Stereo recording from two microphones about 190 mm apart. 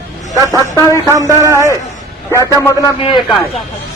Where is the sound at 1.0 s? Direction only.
15° right (ahead or behind).